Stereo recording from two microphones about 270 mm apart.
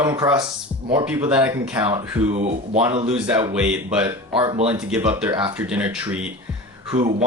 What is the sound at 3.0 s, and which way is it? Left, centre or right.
Speech, centre.